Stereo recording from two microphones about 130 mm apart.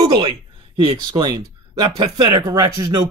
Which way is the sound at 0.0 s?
30° right (ahead or behind).